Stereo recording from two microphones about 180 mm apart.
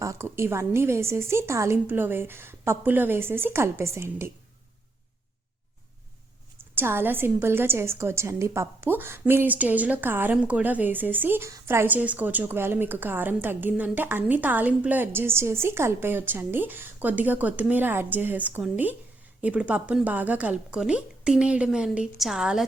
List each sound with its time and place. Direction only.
0.0 s a woman's voice: 15° right (ahead or behind)
6.7 s a woman's voice: 10° right (ahead or behind)